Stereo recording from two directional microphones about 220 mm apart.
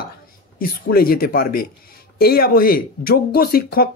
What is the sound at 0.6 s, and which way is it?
Speech, 40° left (ahead or behind).